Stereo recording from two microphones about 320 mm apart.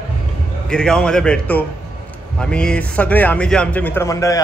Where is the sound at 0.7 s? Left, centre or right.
Centre.